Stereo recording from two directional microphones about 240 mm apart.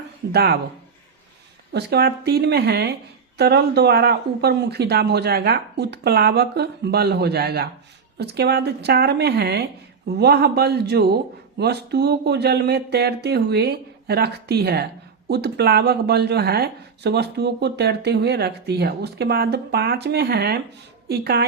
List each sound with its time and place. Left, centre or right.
0.3 s a woman's voice: right
1.7 s a woman's voice: right